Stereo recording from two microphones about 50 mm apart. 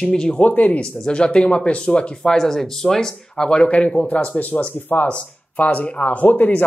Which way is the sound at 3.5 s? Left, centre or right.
Left.